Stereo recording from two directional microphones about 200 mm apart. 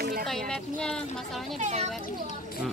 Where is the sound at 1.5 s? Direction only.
35° right (ahead or behind).